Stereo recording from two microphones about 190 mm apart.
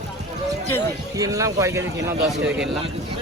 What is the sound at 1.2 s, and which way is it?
Speech, 15° right (ahead or behind).